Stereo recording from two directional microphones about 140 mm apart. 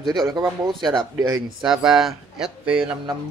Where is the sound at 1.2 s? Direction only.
30° right (ahead or behind).